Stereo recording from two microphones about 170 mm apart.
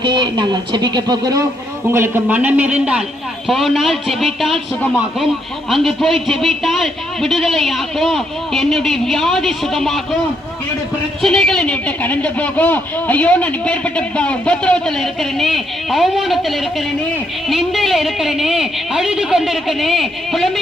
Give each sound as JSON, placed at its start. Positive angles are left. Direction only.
{"t": 0.0, "sound": "a man's voice", "side_deg": -25}
{"t": 11.2, "sound": "a man's voice", "side_deg": 5}